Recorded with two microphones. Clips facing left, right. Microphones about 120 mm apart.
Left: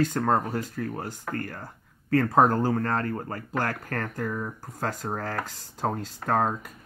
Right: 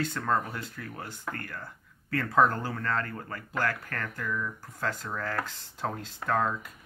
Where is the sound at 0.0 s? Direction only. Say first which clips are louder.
Left 5 dB; 40° left (ahead or behind).